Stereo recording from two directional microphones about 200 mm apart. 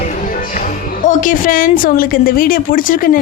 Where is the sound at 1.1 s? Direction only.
40° left (ahead or behind).